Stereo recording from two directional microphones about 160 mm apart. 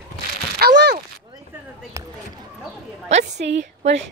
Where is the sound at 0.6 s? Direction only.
80° right.